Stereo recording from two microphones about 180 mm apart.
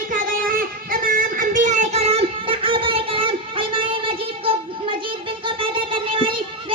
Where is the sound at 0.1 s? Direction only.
50° right (ahead or behind).